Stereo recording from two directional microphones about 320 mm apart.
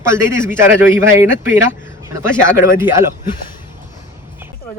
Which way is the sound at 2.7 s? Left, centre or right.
Centre.